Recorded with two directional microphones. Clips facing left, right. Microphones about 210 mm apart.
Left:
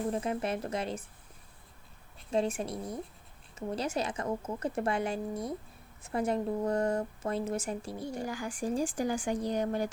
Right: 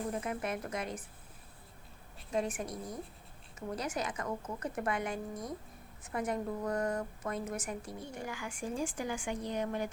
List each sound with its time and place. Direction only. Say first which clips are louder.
0.1 s a woman's voice: left 4 dB; 30° left (ahead or behind)
2.3 s a woman's voice: left 4 dB; 30° left (ahead or behind)